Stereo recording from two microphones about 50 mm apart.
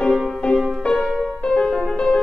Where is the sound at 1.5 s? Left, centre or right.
Centre.